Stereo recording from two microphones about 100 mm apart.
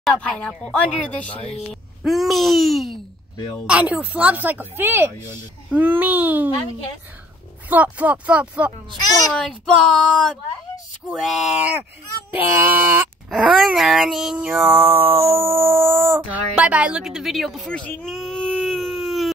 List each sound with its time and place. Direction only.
0.2 s speech: 10° left (ahead or behind)
3.6 s a sound: 10° right (ahead or behind)
7.7 s a sound: 15° right (ahead or behind)
9.4 s speech: 5° left (ahead or behind)
12.4 s speech: 20° right (ahead or behind)
13.3 s a sound: 5° right (ahead or behind); by 16.3 s 25° right (ahead or behind)
16.5 s speech: 10° right (ahead or behind)
17.6 s speech: 15° left (ahead or behind)
18.0 s baby cry: 5° left (ahead or behind)